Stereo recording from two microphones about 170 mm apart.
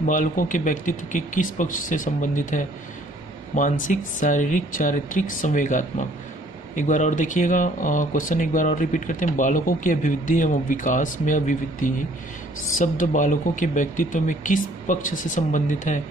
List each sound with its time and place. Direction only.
0.0 s speech: 50° left (ahead or behind)